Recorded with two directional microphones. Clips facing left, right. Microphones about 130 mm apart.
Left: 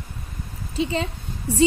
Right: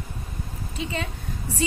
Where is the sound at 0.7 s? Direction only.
30° left (ahead or behind).